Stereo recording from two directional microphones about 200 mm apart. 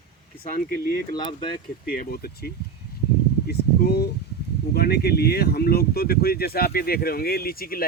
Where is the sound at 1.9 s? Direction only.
45° left (ahead or behind).